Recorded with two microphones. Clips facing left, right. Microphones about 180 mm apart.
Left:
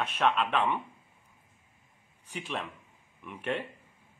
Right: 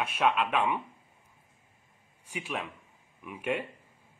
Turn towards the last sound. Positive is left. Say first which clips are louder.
# right 1 dB
turn(degrees=-10)  # may be behind; listen again after turning